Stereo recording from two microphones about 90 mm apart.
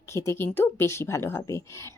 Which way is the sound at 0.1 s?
30° left (ahead or behind).